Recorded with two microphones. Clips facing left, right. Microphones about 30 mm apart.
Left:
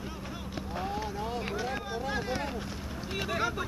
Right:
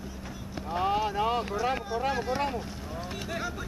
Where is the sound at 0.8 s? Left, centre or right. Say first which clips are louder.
Right 10 dB; right.